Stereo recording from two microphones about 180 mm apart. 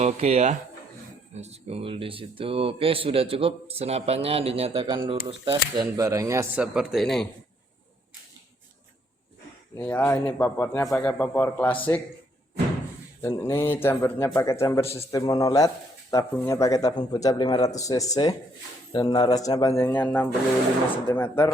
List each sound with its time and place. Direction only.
0.0 s speech: 35° right (ahead or behind); by 6.5 s 15° right (ahead or behind)
6.6 s speech: centre (ahead or behind)
9.7 s speech: 10° left (ahead or behind)
13.2 s speech: 15° left (ahead or behind)